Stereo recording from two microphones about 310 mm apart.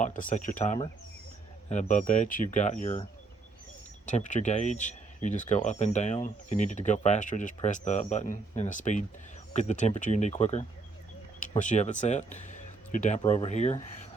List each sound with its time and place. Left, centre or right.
0.0 s speech: left